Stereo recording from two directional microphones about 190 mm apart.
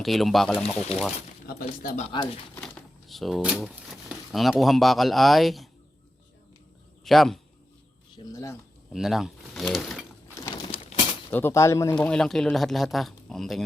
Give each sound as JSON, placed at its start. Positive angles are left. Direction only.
{"t": 0.0, "sound": "speech", "side_deg": 0}
{"t": 1.5, "sound": "speech", "side_deg": 50}
{"t": 2.0, "sound": "speech", "side_deg": 30}
{"t": 2.6, "sound": "typewriter", "side_deg": 5}
{"t": 4.1, "sound": "speech", "side_deg": 0}
{"t": 7.0, "sound": "speech", "side_deg": 0}
{"t": 8.1, "sound": "speech", "side_deg": 20}
{"t": 8.9, "sound": "speech", "side_deg": 0}
{"t": 10.3, "sound": "crumpling", "side_deg": 20}
{"t": 11.3, "sound": "speech", "side_deg": 10}
{"t": 11.9, "sound": "speech", "side_deg": 5}